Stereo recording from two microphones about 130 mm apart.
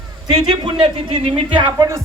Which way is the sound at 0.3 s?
40° right (ahead or behind).